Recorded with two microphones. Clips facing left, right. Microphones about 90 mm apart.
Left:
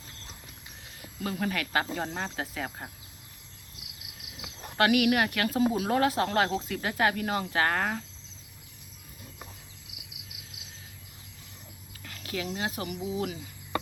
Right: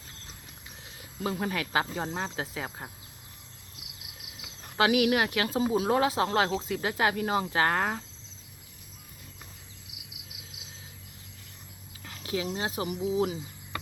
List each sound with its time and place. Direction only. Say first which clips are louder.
1.2 s speech: right 1 dB; 25° right (ahead or behind)
4.8 s speech: even; 25° right (ahead or behind)
12.0 s speech: right 3 dB; 20° right (ahead or behind)